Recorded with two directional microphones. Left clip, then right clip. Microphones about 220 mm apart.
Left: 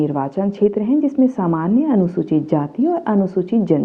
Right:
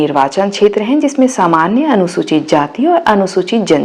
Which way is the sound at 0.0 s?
10° right (ahead or behind).